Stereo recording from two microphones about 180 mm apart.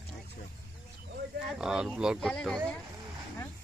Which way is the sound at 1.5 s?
5° right (ahead or behind).